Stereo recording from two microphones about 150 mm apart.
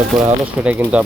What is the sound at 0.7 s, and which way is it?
Speech, 10° right (ahead or behind).